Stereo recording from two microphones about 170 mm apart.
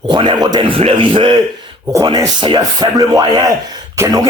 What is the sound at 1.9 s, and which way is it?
Speech, 20° right (ahead or behind).